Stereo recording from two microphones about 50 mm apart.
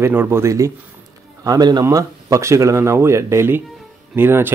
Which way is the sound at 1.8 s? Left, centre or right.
Right.